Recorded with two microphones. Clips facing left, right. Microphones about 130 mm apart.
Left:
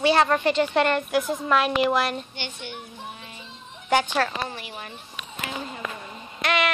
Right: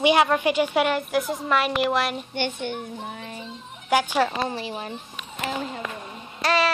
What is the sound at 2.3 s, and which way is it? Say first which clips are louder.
A child's voice: right 8 dB; 50° right (ahead or behind).